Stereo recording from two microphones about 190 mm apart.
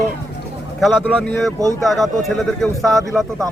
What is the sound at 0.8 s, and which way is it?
A man's voice, centre (ahead or behind).